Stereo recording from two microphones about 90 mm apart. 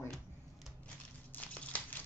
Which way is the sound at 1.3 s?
15° left (ahead or behind).